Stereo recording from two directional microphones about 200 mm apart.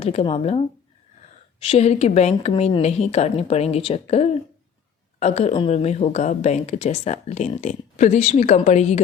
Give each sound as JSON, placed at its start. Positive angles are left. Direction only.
{"t": 0.0, "sound": "a woman's voice", "side_deg": 30}